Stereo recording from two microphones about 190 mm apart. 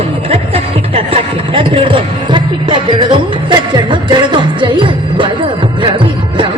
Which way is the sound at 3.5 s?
25° right (ahead or behind).